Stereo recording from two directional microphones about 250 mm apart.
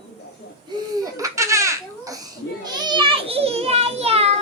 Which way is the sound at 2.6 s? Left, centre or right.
Centre.